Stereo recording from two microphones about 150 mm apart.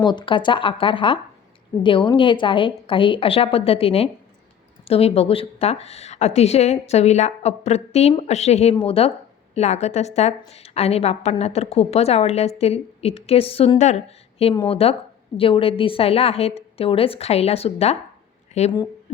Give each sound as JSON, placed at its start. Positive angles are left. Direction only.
{"t": 0.0, "sound": "a woman's voice", "side_deg": 30}